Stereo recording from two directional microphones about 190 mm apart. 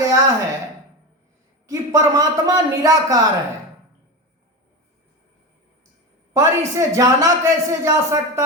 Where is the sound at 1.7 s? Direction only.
15° right (ahead or behind).